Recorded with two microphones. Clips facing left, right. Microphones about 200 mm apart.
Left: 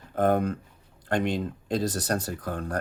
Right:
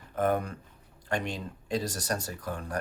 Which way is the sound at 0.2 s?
60° left (ahead or behind).